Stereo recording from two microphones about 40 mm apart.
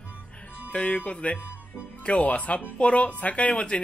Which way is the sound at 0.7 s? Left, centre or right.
Left.